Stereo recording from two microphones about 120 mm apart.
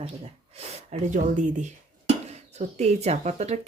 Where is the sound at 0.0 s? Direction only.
60° right (ahead or behind); by 1.7 s 85° right.